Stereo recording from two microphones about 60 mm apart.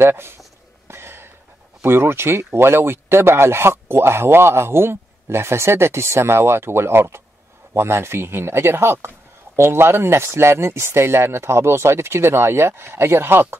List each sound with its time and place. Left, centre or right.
0.0 s speech: right
0.8 s cough: right
1.8 s speech: right